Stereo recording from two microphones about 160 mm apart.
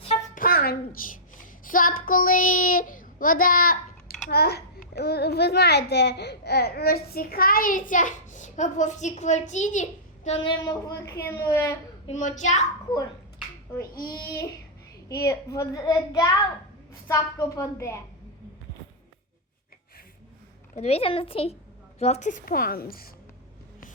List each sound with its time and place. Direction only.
0.2 s a sound: 60° left (ahead or behind)
1.4 s child singing: 60° left (ahead or behind)
4.3 s a child's voice: 85° left; by 9.8 s 50° left (ahead or behind)
10.2 s a woman's voice: 35° left (ahead or behind); by 11.8 s 15° left (ahead or behind)
12.0 s a child's voice: 50° left (ahead or behind)
15.1 s a woman's voice: 20° left (ahead or behind)
20.7 s a woman's voice: 40° left (ahead or behind); by 23.0 s 65° left (ahead or behind)